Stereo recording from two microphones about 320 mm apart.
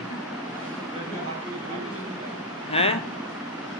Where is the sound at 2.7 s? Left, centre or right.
Centre.